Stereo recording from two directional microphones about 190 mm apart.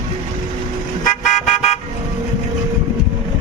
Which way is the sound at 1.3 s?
35° left (ahead or behind).